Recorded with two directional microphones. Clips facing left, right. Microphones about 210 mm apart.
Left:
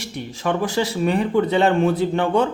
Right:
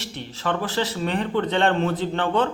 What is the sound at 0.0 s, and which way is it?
A man's voice, 15° left (ahead or behind).